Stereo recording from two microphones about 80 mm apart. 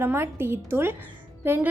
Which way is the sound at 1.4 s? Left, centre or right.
Right.